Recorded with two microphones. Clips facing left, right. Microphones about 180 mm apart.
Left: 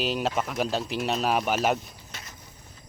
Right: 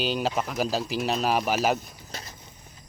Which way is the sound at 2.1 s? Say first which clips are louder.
Right 6 dB; 35° right (ahead or behind).